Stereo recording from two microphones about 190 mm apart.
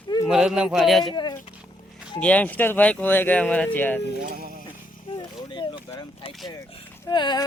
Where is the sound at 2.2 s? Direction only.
5° left (ahead or behind).